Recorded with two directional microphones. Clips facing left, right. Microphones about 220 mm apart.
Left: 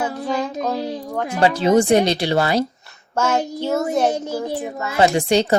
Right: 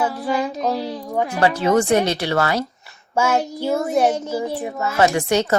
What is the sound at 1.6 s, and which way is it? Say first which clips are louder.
Speech: left 3 dB; 15° left (ahead or behind).